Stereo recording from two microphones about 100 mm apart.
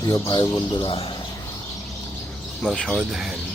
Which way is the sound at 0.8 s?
60° left (ahead or behind).